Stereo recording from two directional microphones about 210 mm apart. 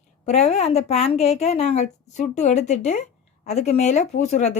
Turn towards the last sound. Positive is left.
turn(degrees=35)  # may be behind; listen again after turning